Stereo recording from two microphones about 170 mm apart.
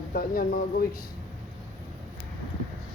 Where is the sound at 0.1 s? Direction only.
60° left (ahead or behind).